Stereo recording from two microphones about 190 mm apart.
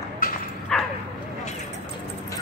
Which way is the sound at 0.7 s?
5° left (ahead or behind).